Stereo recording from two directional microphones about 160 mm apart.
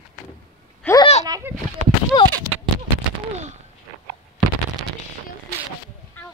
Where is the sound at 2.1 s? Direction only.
25° left (ahead or behind).